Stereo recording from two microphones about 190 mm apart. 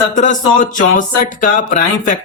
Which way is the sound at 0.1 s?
40° left (ahead or behind).